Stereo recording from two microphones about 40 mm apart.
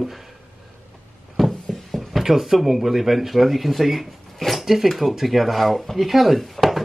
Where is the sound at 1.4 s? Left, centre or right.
Centre.